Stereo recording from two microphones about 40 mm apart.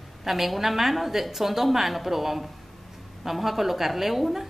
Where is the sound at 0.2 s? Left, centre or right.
Centre.